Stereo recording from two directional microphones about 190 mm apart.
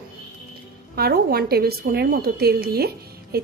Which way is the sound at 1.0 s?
55° right (ahead or behind).